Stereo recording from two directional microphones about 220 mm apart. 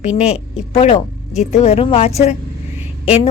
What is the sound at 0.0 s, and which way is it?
A woman's voice, 30° left (ahead or behind).